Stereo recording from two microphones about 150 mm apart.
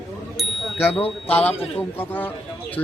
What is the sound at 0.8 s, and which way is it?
A man's voice, 10° left (ahead or behind).